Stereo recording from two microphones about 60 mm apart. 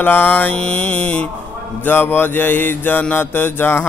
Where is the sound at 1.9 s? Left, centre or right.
Left.